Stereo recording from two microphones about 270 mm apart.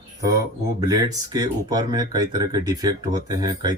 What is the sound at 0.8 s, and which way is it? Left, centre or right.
Speech, centre.